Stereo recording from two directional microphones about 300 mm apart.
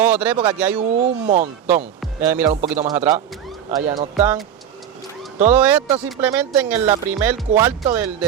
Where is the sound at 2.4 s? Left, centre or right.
Right.